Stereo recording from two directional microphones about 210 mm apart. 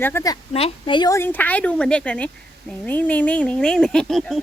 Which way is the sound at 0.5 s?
25° left (ahead or behind).